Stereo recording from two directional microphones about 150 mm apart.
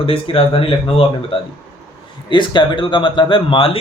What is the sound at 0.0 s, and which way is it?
Speech, 40° left (ahead or behind).